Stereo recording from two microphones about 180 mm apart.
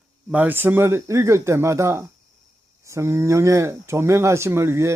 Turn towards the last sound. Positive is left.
turn(degrees=-15)  # may be behind; listen again after turning